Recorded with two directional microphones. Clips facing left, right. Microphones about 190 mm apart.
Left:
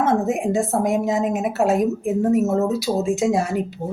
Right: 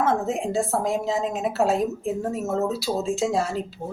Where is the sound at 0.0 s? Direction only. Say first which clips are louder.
Left 4 dB; 20° left (ahead or behind).